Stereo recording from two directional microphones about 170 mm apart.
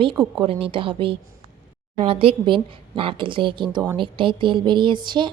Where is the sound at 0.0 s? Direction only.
25° right (ahead or behind).